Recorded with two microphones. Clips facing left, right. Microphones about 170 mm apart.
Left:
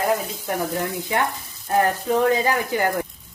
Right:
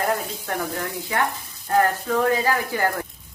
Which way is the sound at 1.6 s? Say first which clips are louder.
Even; 20° left (ahead or behind).